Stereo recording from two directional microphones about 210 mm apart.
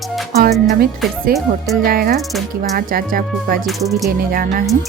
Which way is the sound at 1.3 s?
45° right (ahead or behind).